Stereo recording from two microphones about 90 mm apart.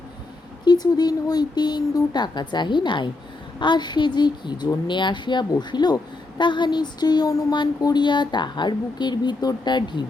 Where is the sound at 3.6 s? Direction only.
55° left (ahead or behind).